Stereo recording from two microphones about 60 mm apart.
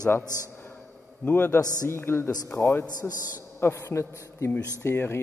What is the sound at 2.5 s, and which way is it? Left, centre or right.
Speech, left.